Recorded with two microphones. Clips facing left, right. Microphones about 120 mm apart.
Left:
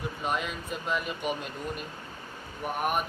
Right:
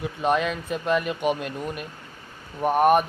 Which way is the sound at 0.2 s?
90° right.